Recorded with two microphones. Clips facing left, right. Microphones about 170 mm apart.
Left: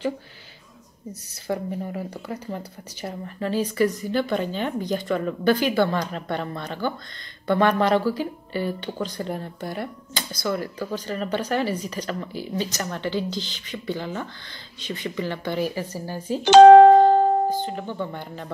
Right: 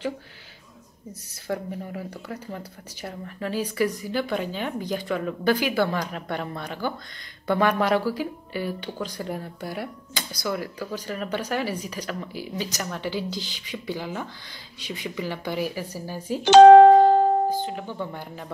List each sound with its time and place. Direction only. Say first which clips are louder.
1.5 s speech: left 3 dB; centre (ahead or behind)
16.4 s speech: left 1 dB; 70° left (ahead or behind)
17.6 s speech: left 2 dB; 5° right (ahead or behind)